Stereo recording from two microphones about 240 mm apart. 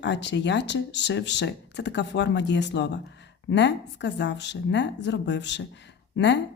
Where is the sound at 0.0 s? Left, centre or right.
Left.